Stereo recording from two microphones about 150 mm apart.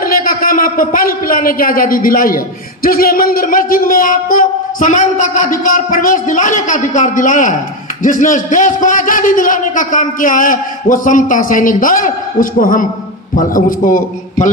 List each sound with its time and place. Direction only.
0.0 s a man's voice: 70° left (ahead or behind)